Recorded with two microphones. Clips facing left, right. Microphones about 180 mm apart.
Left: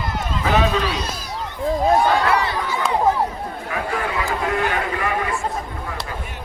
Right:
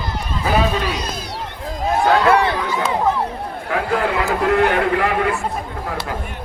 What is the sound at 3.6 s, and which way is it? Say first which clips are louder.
Speech: right 6 dB; 70° right (ahead or behind).